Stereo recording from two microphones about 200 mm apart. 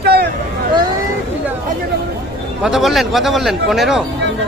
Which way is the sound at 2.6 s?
Centre (ahead or behind).